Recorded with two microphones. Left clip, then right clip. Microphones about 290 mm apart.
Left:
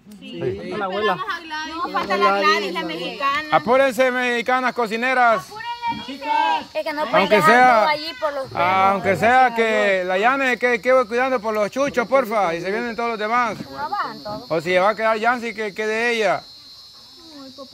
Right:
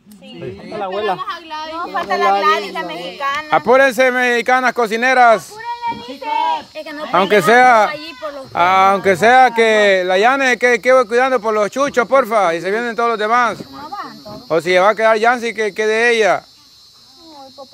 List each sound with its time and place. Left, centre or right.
0.9 s speech: right
1.2 s a sound: centre
2.0 s speech: centre
6.7 s speech: centre
7.2 s speech: centre